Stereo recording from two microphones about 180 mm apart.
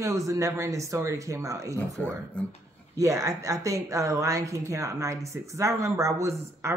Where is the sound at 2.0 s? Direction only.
10° left (ahead or behind).